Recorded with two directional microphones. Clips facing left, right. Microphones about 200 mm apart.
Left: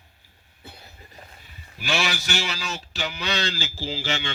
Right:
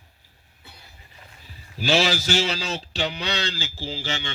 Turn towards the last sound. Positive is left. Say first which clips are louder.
# left 1 dB
turn(degrees=-20)  # may be behind; listen again after turning